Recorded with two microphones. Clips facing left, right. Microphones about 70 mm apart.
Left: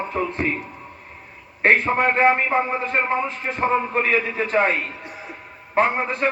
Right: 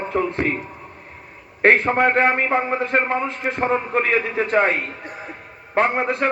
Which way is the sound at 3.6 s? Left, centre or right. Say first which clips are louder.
Even; right.